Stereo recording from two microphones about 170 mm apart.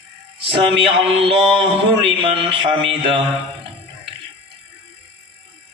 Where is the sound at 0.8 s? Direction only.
35° right (ahead or behind).